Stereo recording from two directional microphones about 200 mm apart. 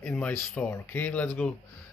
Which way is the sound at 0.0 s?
5° left (ahead or behind).